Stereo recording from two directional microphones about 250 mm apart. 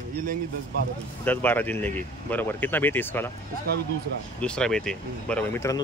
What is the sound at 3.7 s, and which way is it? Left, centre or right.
Speech, right.